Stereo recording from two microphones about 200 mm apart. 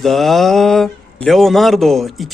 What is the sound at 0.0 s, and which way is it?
Speech, centre (ahead or behind).